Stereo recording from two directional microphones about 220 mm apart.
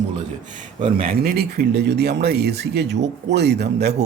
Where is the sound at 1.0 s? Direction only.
40° right (ahead or behind).